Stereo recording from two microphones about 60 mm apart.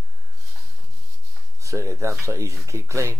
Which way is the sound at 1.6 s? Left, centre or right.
Right.